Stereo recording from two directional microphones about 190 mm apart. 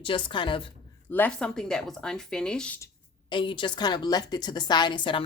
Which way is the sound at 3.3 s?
25° left (ahead or behind).